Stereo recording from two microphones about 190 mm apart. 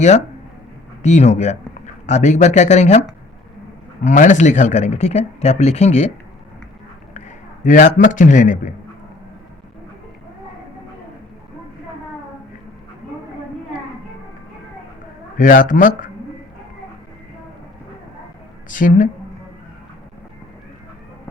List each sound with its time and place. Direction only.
1.0 s speech: 35° left (ahead or behind)
4.0 s speech: 40° left (ahead or behind)
7.6 s speech: 40° left (ahead or behind)
15.4 s a man's voice: 45° left (ahead or behind)
18.7 s a man's voice: 45° left (ahead or behind)